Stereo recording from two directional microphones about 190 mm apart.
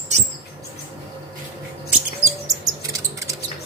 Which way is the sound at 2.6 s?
20° right (ahead or behind).